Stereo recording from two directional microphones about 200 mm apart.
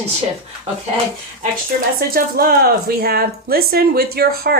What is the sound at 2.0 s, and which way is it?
Speech, 50° right (ahead or behind).